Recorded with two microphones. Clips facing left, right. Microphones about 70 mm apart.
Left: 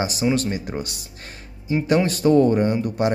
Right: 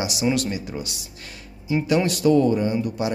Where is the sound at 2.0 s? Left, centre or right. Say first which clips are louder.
Left 2 dB; left.